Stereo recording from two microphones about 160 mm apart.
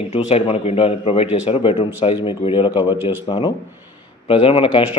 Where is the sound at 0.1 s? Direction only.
40° left (ahead or behind).